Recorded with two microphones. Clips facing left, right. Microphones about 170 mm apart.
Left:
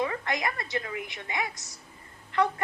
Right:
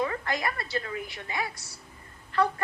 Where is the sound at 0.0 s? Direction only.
20° left (ahead or behind).